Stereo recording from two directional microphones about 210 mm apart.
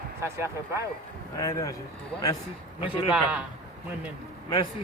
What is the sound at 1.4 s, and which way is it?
Speech, 15° left (ahead or behind).